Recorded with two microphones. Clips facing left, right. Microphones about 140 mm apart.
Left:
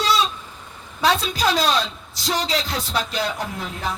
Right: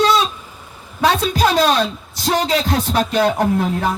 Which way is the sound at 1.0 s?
55° right (ahead or behind).